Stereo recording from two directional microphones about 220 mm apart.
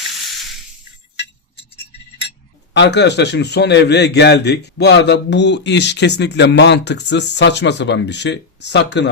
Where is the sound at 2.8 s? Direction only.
50° left (ahead or behind).